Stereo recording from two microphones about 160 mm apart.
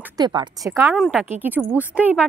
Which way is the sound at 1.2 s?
10° right (ahead or behind).